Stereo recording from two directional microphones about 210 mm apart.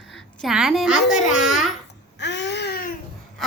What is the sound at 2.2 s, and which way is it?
Baby cry, 55° left (ahead or behind).